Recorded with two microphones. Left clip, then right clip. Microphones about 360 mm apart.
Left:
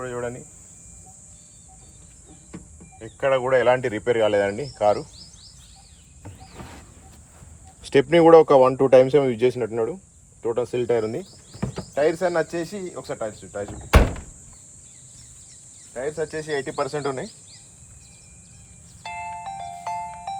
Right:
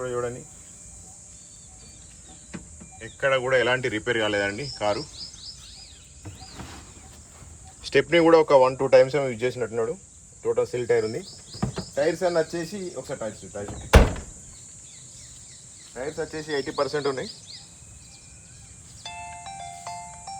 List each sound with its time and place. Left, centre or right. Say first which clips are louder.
0.0 s cricket: right 1 dB; centre
3.0 s cricket: left 2 dB; centre
7.8 s speech: left 3 dB; centre
11.9 s cricket: left 2 dB; centre
16.0 s speech: left 4 dB; left
19.0 s music: left 6 dB; centre